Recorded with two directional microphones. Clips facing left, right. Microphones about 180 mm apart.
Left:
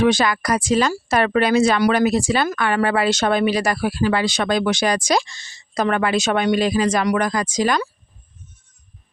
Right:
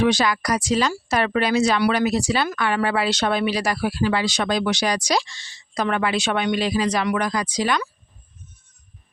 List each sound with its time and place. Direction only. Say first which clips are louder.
0.0 s speech: left 2 dB; 50° left (ahead or behind)